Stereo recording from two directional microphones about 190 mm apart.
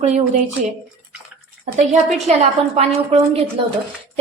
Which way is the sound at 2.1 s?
35° right (ahead or behind).